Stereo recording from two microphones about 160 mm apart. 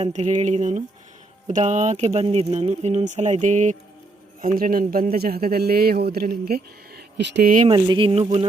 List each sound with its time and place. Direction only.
0.0 s a man's voice: 45° right (ahead or behind); by 7.5 s 90° right
7.7 s speech: 30° right (ahead or behind)